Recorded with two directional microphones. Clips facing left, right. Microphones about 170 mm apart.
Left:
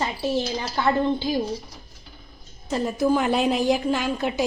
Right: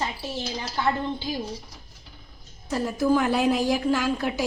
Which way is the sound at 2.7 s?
20° left (ahead or behind).